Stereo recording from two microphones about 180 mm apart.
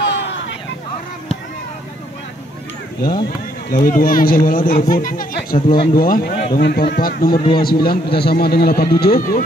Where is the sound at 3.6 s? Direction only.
50° left (ahead or behind).